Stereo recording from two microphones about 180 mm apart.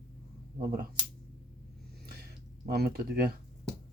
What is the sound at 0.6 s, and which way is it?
Speech, 55° right (ahead or behind).